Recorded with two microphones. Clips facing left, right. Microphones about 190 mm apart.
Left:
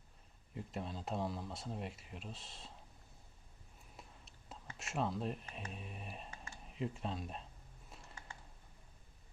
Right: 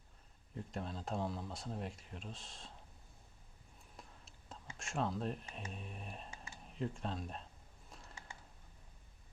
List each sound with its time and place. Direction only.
0.5 s speech: centre (ahead or behind)
3.9 s whispering: 5° left (ahead or behind)
4.8 s speech: 5° left (ahead or behind)
7.9 s a sound: centre (ahead or behind)